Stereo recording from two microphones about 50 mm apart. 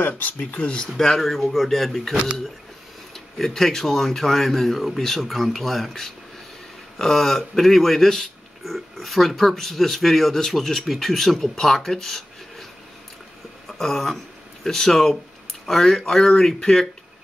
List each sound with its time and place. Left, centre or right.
0.0 s speech: left
0.8 s speech: centre
3.3 s speech: centre
13.7 s speech: centre